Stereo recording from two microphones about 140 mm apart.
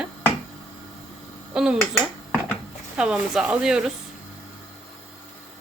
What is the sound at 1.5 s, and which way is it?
Speech, 5° right (ahead or behind).